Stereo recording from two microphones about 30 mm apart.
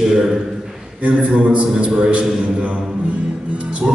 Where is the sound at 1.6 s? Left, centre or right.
Right.